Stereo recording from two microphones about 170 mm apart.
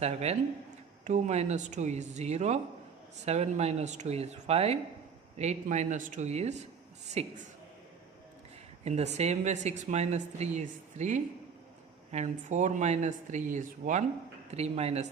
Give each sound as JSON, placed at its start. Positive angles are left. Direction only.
{"t": 0.0, "sound": "a woman's voice", "side_deg": -40}
{"t": 8.8, "sound": "a woman's voice", "side_deg": -40}